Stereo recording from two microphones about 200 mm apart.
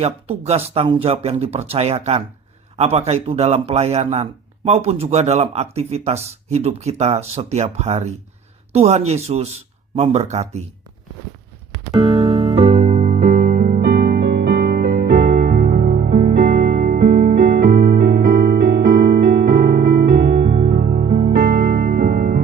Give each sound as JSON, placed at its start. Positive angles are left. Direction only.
{"t": 0.0, "sound": "a man's voice", "side_deg": -30}
{"t": 11.9, "sound": "music", "side_deg": -25}